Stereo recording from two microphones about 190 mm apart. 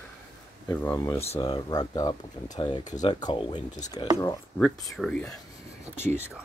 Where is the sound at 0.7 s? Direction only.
15° left (ahead or behind).